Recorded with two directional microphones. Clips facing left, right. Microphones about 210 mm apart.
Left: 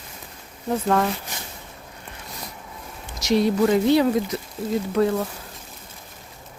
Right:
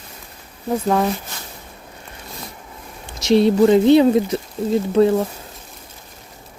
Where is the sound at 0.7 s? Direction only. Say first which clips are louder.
Right 3 dB; 10° right (ahead or behind).